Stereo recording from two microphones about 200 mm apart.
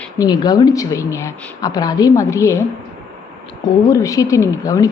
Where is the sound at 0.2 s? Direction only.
20° left (ahead or behind).